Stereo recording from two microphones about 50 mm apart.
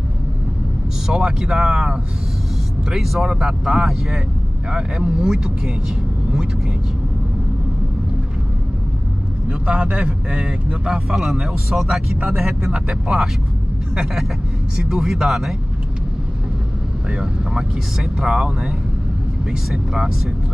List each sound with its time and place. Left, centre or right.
1.0 s speech: centre
2.9 s speech: centre
9.5 s a man's voice: right
11.1 s speech: centre
12.6 s a man's voice: right
14.8 s speech: centre
17.1 s a man's voice: centre
18.0 s speech: centre
19.7 s speech: centre